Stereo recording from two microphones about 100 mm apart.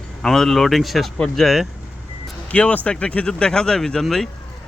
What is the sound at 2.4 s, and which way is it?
Speech, 15° left (ahead or behind).